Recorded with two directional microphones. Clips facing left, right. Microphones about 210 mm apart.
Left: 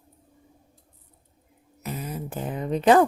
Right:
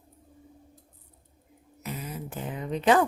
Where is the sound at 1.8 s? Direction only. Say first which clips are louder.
Left 4 dB; 40° left (ahead or behind).